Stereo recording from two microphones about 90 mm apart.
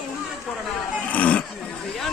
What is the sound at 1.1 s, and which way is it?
Speech, 15° left (ahead or behind).